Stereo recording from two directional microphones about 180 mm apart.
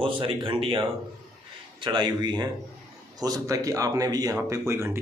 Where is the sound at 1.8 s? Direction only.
25° right (ahead or behind).